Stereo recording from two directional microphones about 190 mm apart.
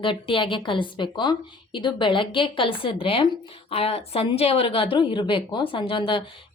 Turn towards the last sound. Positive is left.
turn(degrees=25)  # may be behind; listen again after turning